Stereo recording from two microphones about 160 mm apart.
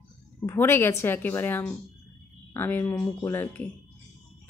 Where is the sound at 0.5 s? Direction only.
15° left (ahead or behind).